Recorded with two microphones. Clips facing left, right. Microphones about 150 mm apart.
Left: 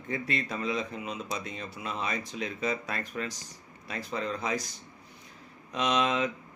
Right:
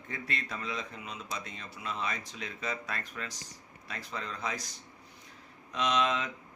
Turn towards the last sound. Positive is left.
turn(degrees=15)  # may be behind; listen again after turning